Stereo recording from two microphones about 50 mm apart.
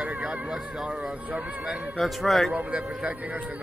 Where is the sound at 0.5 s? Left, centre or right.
Centre.